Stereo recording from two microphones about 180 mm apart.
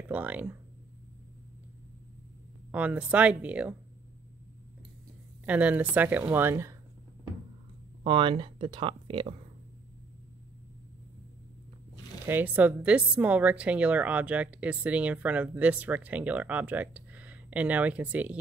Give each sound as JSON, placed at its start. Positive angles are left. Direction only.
{"t": 0.1, "sound": "a woman's voice", "side_deg": -10}
{"t": 2.7, "sound": "a woman's voice", "side_deg": -5}
{"t": 5.4, "sound": "a woman's voice", "side_deg": -10}
{"t": 8.0, "sound": "speech", "side_deg": -30}
{"t": 12.3, "sound": "a woman's voice", "side_deg": -10}